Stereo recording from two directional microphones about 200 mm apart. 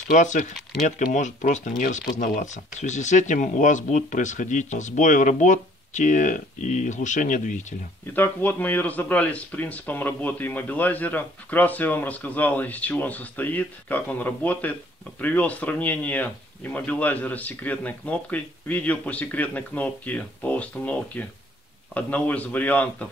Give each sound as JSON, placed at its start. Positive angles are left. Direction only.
{"t": 0.1, "sound": "speech", "side_deg": 40}
{"t": 8.1, "sound": "speech", "side_deg": 10}